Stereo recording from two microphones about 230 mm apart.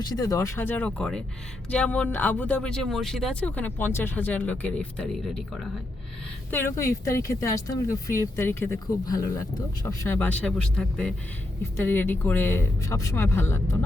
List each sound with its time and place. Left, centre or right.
0.0 s speech: centre
6.5 s speech: centre